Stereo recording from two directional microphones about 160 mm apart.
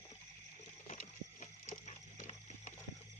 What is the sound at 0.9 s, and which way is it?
Horse, 55° left (ahead or behind).